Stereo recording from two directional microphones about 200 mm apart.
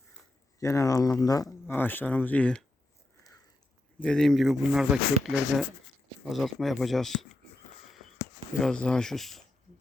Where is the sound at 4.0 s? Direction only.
5° left (ahead or behind).